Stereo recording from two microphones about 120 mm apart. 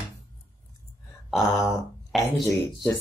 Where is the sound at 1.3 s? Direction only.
Centre (ahead or behind).